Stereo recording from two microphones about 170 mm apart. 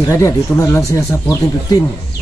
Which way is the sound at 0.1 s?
15° left (ahead or behind).